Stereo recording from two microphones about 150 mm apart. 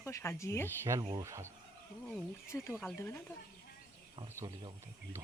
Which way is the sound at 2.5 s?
20° left (ahead or behind).